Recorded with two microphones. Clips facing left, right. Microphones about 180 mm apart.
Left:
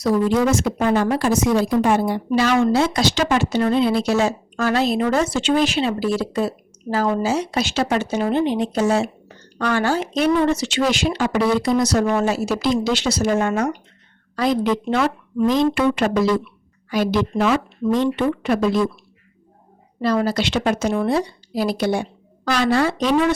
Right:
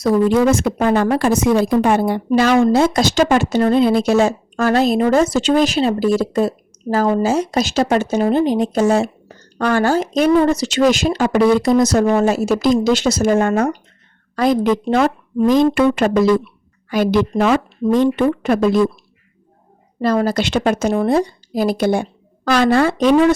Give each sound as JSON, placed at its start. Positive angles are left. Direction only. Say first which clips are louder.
{"t": 0.0, "sound": "speech", "louder": "right 4 dB", "side_deg": -55}
{"t": 20.0, "sound": "speech", "louder": "right 3 dB", "side_deg": -45}